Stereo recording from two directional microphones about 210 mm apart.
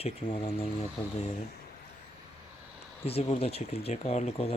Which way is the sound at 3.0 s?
30° left (ahead or behind).